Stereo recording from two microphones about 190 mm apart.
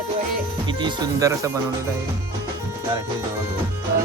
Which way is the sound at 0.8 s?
25° right (ahead or behind).